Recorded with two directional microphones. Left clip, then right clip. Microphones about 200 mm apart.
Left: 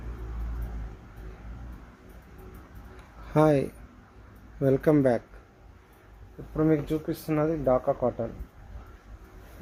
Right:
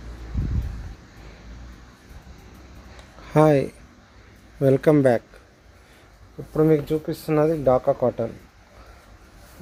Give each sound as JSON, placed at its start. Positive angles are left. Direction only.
{"t": 3.2, "sound": "speech", "side_deg": -35}
{"t": 6.5, "sound": "speech", "side_deg": -50}